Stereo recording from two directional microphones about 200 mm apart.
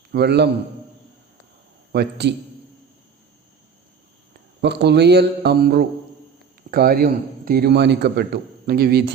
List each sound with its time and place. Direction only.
0.1 s a man's voice: 55° right (ahead or behind)
1.9 s a man's voice: 55° right (ahead or behind)
4.6 s a man's voice: 55° right (ahead or behind)